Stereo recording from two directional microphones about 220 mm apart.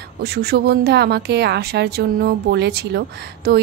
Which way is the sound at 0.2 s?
45° right (ahead or behind).